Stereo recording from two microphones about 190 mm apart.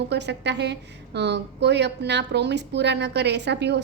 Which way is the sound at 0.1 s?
65° right (ahead or behind).